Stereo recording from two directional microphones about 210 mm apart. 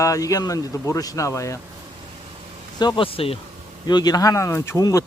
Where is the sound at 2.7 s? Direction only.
20° left (ahead or behind).